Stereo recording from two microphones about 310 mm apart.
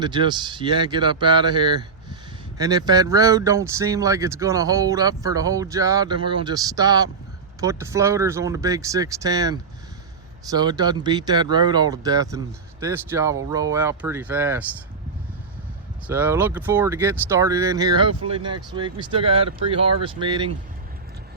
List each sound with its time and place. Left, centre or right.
0.0 s speech: centre
16.0 s speech: centre